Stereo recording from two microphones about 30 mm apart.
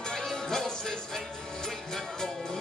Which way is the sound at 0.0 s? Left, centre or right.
Centre.